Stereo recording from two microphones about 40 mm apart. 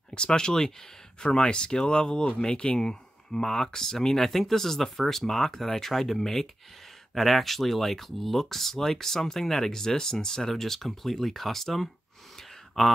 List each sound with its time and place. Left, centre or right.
0.1 s speech: left; by 12.9 s centre